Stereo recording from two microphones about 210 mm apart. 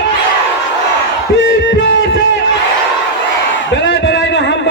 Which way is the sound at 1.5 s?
60° left (ahead or behind).